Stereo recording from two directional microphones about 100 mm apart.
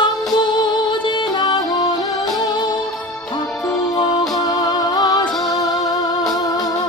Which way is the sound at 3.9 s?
45° left (ahead or behind).